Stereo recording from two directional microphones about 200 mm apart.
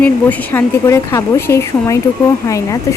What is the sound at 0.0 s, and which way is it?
A woman's voice, 10° left (ahead or behind).